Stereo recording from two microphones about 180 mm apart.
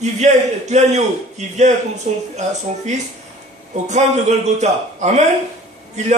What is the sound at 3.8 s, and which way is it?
A man's voice, 40° right (ahead or behind).